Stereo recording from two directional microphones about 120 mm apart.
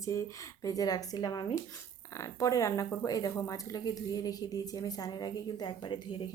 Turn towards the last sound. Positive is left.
turn(degrees=40)  # may be behind; listen again after turning